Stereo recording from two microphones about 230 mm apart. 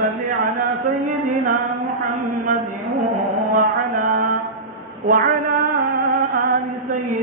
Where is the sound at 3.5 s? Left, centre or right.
Right.